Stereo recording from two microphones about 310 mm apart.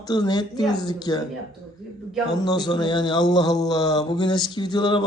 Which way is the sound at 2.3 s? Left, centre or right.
Centre.